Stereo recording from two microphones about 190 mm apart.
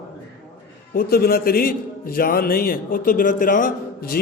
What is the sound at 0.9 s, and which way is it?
A man's voice, 50° left (ahead or behind).